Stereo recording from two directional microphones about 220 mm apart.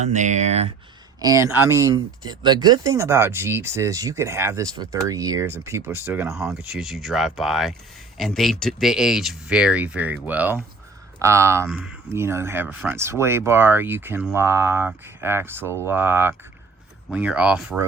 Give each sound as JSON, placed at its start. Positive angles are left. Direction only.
{"t": 0.0, "sound": "speech", "side_deg": -35}
{"t": 1.2, "sound": "speech", "side_deg": -15}
{"t": 6.5, "sound": "speech", "side_deg": 0}